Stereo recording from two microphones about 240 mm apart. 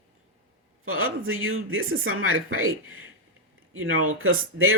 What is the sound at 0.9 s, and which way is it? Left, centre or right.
Speech, right.